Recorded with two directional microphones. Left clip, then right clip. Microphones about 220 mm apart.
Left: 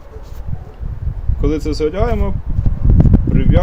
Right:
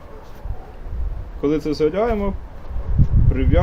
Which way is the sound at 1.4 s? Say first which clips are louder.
Left 1 dB; 10° left (ahead or behind).